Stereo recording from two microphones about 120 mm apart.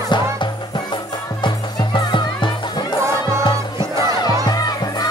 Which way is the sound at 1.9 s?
40° left (ahead or behind).